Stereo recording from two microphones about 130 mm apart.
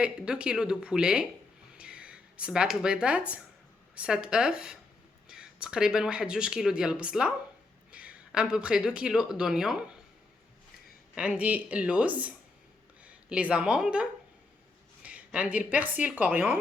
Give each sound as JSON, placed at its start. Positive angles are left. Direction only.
{"t": 0.0, "sound": "speech", "side_deg": -5}
{"t": 11.1, "sound": "speech", "side_deg": -10}